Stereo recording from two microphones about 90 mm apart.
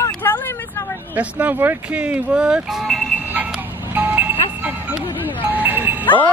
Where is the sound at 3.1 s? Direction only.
20° right (ahead or behind).